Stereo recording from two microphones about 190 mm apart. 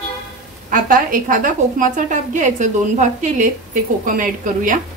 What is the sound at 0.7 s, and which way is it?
A woman's voice, 45° right (ahead or behind).